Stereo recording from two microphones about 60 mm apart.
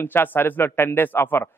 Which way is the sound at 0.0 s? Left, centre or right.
Left.